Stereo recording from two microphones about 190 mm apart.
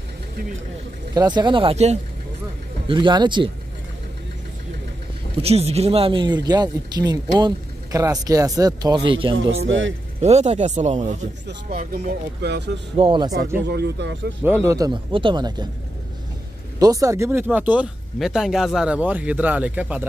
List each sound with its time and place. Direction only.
1.1 s speech: 20° right (ahead or behind)
5.4 s speech: 35° right (ahead or behind)
9.7 s speech: 85° right
10.2 s speech: 35° right (ahead or behind)
12.4 s speech: 60° right (ahead or behind)
12.9 s speech: 25° right (ahead or behind)
13.7 s speech: 60° right (ahead or behind)
14.4 s speech: 15° right (ahead or behind)
16.8 s speech: 15° right (ahead or behind)